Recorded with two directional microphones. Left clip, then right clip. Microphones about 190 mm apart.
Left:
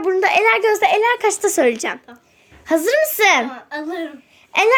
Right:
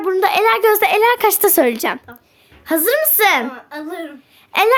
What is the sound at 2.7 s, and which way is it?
Speech, 10° right (ahead or behind).